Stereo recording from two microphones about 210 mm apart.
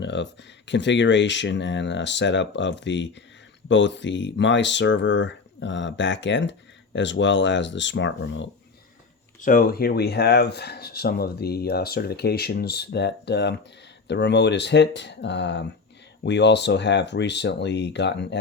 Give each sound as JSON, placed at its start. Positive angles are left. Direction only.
{"t": 0.0, "sound": "speech", "side_deg": 55}
{"t": 9.4, "sound": "speech", "side_deg": 40}